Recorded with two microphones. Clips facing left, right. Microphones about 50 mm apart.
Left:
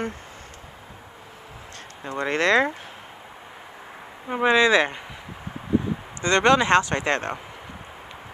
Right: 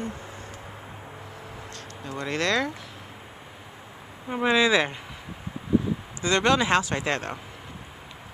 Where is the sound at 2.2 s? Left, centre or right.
Left.